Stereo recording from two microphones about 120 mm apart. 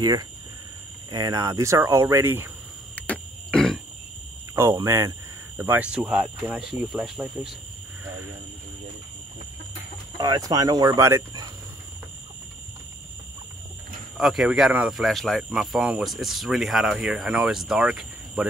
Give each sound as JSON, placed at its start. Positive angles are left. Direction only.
{"t": 0.0, "sound": "speech", "side_deg": -35}
{"t": 3.0, "sound": "a sound", "side_deg": 10}
{"t": 4.8, "sound": "speech", "side_deg": -25}
{"t": 5.9, "sound": "speech", "side_deg": -5}
{"t": 10.1, "sound": "speech", "side_deg": -35}
{"t": 14.1, "sound": "speech", "side_deg": 0}